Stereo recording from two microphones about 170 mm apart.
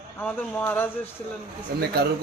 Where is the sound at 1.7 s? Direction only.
65° right (ahead or behind).